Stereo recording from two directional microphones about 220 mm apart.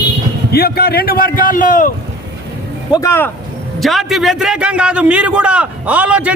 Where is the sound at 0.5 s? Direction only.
45° left (ahead or behind).